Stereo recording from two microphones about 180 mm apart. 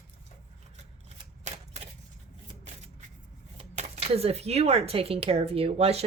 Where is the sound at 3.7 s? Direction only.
35° right (ahead or behind).